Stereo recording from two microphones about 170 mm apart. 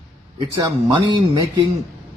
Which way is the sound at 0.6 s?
25° right (ahead or behind).